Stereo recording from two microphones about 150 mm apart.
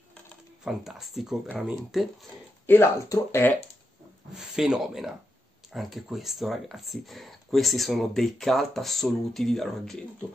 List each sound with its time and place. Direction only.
0.7 s speech: centre (ahead or behind)
2.6 s speech: 15° left (ahead or behind)
4.4 s speech: 5° right (ahead or behind)